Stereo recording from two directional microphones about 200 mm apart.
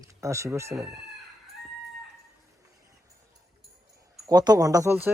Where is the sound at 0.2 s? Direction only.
15° right (ahead or behind).